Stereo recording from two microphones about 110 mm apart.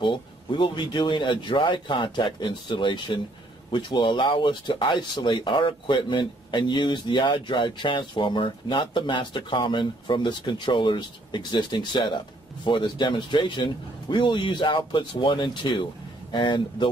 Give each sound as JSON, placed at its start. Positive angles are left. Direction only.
{"t": 0.0, "sound": "speech", "side_deg": 45}